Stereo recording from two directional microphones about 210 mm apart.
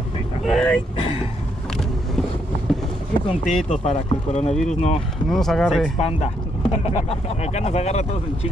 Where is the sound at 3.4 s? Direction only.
35° left (ahead or behind).